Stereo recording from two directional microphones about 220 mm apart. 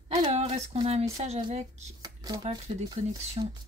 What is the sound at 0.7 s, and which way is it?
Speech, 30° right (ahead or behind).